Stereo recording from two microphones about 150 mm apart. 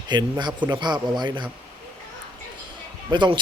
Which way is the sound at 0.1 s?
30° right (ahead or behind).